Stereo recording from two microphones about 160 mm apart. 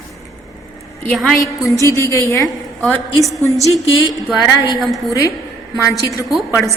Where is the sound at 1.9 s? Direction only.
15° left (ahead or behind).